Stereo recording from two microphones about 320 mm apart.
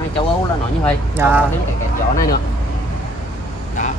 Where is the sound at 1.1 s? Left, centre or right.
Centre.